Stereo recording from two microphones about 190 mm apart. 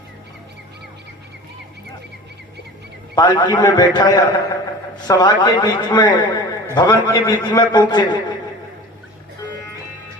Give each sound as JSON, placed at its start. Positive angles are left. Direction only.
{"t": 3.2, "sound": "a man's voice", "side_deg": 25}